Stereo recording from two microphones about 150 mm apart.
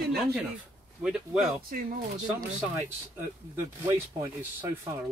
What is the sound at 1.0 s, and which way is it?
Speech, 5° right (ahead or behind).